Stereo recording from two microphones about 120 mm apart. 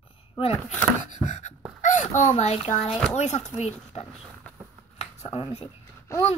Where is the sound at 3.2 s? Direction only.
80° left.